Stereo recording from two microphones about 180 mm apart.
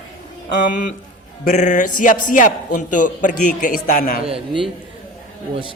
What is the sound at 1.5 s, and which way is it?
A man's voice, 45° left (ahead or behind).